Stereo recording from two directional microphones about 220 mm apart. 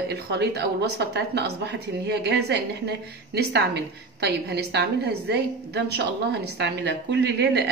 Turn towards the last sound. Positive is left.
turn(degrees=-50)  # may be behind; listen again after turning